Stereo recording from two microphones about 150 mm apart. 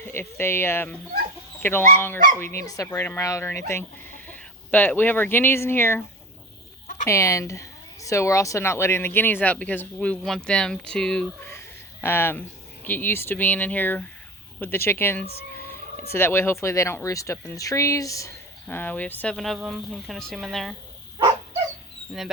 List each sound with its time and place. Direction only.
0.0 s speech: 15° left (ahead or behind)
7.1 s speech: 20° left (ahead or behind); by 20.7 s centre (ahead or behind)